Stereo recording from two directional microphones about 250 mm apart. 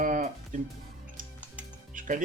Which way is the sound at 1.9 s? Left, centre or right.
Right.